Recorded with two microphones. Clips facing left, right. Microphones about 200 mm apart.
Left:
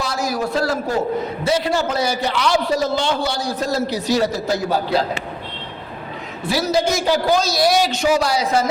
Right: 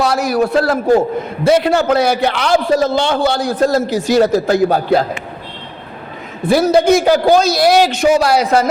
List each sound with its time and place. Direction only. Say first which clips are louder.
0.0 s a man's voice: right 8 dB; 65° right (ahead or behind)
6.4 s a man's voice: right 8 dB; 55° right (ahead or behind)